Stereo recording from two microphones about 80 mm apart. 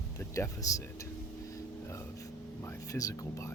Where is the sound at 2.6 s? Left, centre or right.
Left.